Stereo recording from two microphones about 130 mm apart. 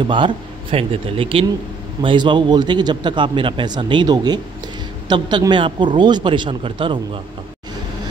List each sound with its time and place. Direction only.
0.0 s a man's voice: 40° right (ahead or behind)